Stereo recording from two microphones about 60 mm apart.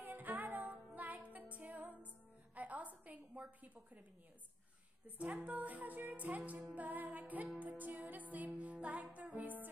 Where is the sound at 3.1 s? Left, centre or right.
Right.